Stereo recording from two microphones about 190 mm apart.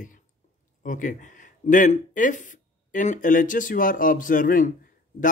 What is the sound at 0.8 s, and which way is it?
Speech, 45° left (ahead or behind).